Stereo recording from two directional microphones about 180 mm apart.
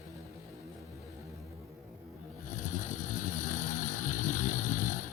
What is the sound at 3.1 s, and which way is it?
Vehicle, 45° left (ahead or behind).